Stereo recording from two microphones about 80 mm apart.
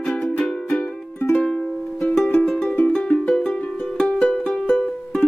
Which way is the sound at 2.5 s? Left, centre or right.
Centre.